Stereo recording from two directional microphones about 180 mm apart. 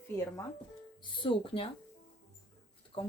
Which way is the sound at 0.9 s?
25° left (ahead or behind).